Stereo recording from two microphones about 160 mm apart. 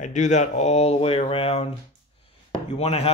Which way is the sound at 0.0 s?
50° left (ahead or behind).